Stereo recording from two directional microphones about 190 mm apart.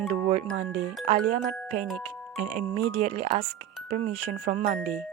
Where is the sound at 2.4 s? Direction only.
35° right (ahead or behind).